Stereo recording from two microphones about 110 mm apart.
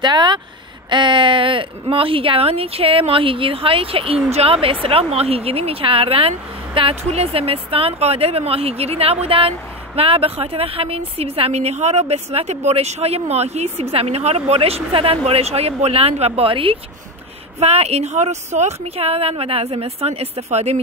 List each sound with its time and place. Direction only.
0.0 s speech: 40° right (ahead or behind)
7.0 s a woman's voice: 70° right (ahead or behind); by 15.1 s 55° right (ahead or behind)
15.2 s a woman's voice: 65° right (ahead or behind)
17.6 s a woman's voice: 70° right (ahead or behind)